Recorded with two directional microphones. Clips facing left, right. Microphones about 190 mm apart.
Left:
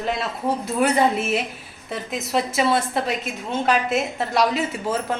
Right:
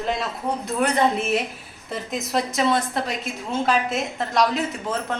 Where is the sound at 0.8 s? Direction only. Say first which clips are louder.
Left 1 dB; 5° left (ahead or behind).